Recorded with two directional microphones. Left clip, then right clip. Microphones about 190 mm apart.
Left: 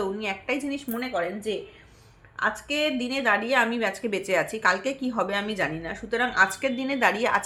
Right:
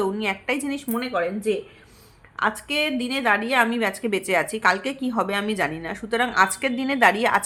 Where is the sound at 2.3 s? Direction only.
35° right (ahead or behind).